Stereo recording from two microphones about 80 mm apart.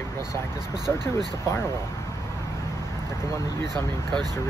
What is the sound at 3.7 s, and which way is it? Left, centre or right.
Speech, right.